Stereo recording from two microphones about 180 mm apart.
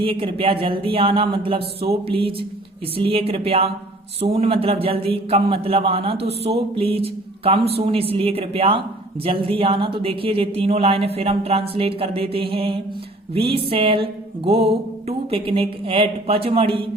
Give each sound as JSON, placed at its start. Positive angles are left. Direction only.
{"t": 0.0, "sound": "speech", "side_deg": -30}
{"t": 13.7, "sound": "music", "side_deg": -30}
{"t": 15.0, "sound": "speech", "side_deg": -30}